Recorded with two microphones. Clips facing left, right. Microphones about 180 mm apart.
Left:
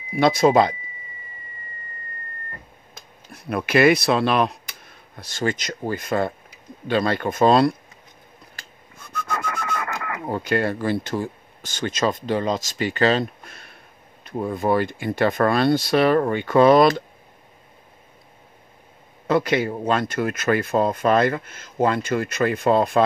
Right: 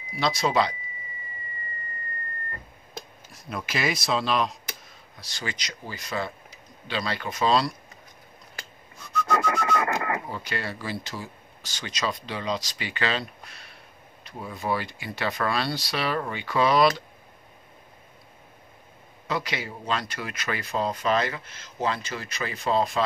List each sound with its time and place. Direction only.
0.1 s speech: 55° left (ahead or behind)
3.3 s speech: 60° left (ahead or behind)
8.9 s whistling: 55° left (ahead or behind)
9.7 s radio: 50° left (ahead or behind)
10.2 s speech: 50° left (ahead or behind)
19.2 s speech: 55° left (ahead or behind)